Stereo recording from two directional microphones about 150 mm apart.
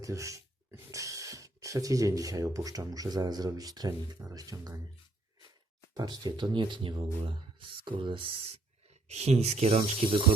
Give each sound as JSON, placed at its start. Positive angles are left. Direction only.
{"t": 0.0, "sound": "speech", "side_deg": -20}
{"t": 5.9, "sound": "speech", "side_deg": -25}
{"t": 9.0, "sound": "speech", "side_deg": -45}